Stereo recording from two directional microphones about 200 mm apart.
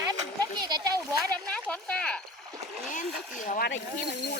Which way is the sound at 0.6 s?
20° right (ahead or behind).